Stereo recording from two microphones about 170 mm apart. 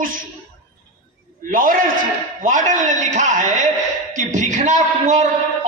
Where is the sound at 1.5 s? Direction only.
55° right (ahead or behind).